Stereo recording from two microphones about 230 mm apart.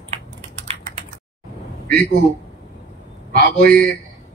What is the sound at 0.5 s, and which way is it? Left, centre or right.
Typing, right.